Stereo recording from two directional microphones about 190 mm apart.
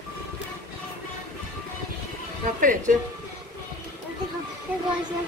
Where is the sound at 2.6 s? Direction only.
45° right (ahead or behind).